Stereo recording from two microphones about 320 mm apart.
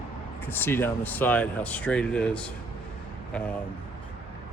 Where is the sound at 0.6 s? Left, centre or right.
Centre.